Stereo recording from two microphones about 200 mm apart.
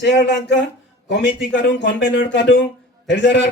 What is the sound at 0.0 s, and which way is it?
A man's voice, 55° left (ahead or behind).